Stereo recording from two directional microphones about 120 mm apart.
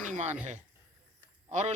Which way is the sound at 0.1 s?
70° right (ahead or behind).